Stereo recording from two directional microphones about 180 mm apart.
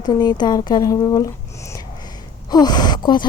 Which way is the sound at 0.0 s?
25° left (ahead or behind).